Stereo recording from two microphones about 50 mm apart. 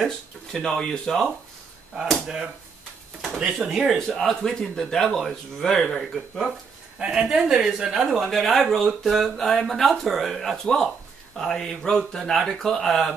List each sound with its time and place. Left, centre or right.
0.0 s speech: centre
2.2 s a woman's voice: centre
7.0 s a woman's voice: centre
8.3 s speech: centre